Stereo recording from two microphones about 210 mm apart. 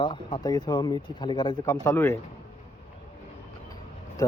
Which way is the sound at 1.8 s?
10° left (ahead or behind).